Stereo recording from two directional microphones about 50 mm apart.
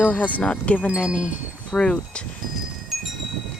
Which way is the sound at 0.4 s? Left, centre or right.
Left.